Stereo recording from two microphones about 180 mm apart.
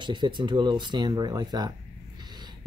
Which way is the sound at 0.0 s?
25° right (ahead or behind).